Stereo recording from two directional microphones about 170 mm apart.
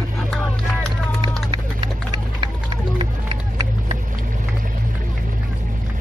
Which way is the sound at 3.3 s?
35° right (ahead or behind).